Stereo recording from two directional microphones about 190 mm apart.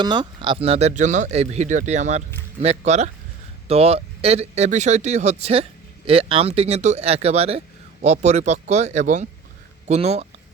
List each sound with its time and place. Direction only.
0.0 s speech: 25° right (ahead or behind)